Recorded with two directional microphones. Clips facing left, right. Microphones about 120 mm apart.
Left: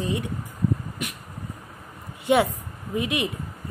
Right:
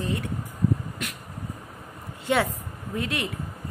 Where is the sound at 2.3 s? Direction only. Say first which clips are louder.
Left 4 dB; 15° left (ahead or behind).